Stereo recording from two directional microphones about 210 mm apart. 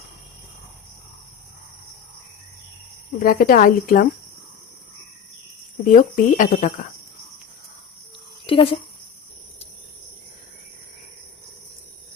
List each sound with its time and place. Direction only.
3.2 s speech: 45° left (ahead or behind)
5.8 s speech: 40° left (ahead or behind)
8.4 s speech: 25° left (ahead or behind)